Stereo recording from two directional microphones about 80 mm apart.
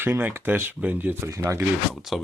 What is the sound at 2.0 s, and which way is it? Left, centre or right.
Speech, centre.